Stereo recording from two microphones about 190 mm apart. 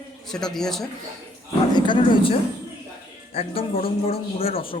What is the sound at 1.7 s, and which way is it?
A man's voice, 25° left (ahead or behind).